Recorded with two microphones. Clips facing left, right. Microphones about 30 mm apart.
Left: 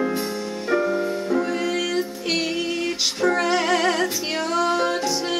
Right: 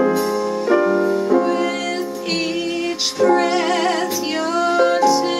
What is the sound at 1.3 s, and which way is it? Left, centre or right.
Music, centre.